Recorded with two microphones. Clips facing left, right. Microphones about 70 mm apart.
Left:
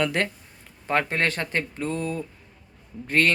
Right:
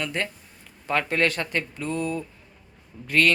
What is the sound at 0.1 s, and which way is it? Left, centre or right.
Speech, left.